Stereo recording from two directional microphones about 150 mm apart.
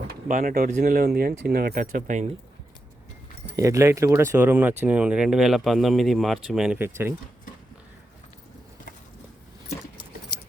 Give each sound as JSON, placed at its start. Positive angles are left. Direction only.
{"t": 0.1, "sound": "speech", "side_deg": -75}
{"t": 3.5, "sound": "speech", "side_deg": -20}
{"t": 6.7, "sound": "speech", "side_deg": -15}